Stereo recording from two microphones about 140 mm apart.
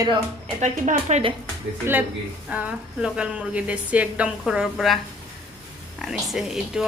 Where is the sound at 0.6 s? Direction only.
55° right (ahead or behind).